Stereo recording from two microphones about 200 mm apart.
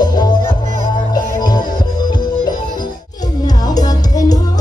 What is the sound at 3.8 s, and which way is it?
Music, 20° left (ahead or behind).